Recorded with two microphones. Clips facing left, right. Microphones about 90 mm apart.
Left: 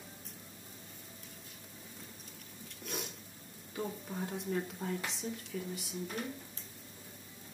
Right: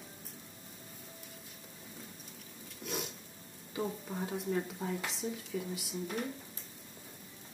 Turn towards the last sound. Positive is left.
turn(degrees=0)  # may be behind; listen again after turning